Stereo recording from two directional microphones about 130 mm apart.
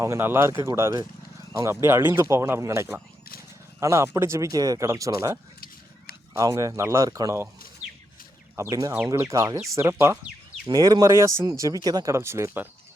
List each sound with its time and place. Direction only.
0.0 s speech: 20° right (ahead or behind)
8.7 s speech: 25° right (ahead or behind)